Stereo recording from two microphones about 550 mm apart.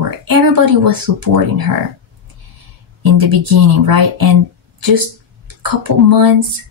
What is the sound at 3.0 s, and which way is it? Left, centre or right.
Speech, right.